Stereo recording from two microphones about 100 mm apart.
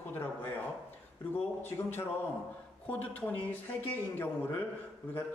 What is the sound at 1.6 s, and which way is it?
Speech, 25° left (ahead or behind).